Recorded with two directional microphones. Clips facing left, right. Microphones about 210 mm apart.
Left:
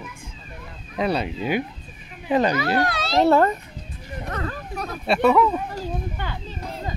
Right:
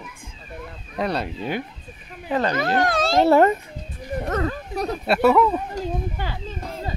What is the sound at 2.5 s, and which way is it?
Speech, 50° right (ahead or behind).